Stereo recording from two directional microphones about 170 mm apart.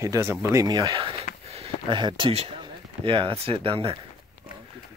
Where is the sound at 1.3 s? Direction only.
55° left (ahead or behind).